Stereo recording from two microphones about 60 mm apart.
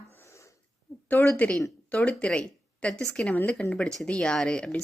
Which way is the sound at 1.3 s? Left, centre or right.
Left.